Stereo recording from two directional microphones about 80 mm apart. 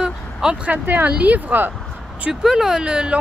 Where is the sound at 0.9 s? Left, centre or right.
Right.